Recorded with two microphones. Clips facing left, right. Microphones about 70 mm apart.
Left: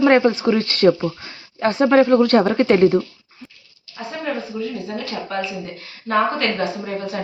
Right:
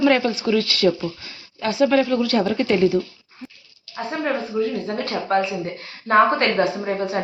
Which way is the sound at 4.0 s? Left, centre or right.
Right.